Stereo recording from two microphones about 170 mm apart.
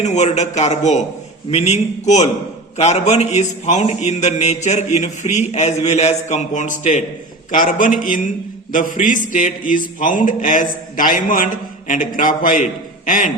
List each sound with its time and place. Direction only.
0.0 s a man's voice: 45° left (ahead or behind)